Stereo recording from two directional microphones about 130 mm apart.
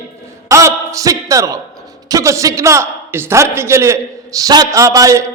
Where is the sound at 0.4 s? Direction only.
25° right (ahead or behind).